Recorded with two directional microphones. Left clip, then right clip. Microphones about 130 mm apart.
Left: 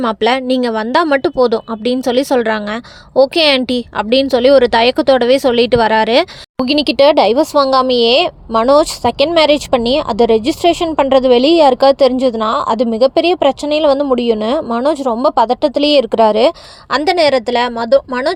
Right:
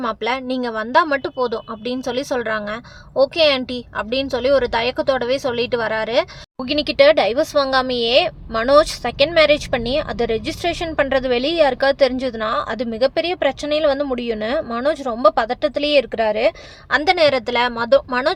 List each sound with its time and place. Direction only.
0.0 s a woman's voice: 55° left (ahead or behind); by 18.3 s 25° left (ahead or behind)